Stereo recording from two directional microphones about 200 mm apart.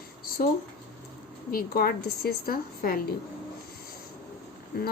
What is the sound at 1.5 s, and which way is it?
A woman's voice, 50° left (ahead or behind).